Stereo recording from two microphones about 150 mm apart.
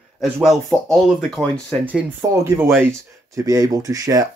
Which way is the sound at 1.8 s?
10° right (ahead or behind).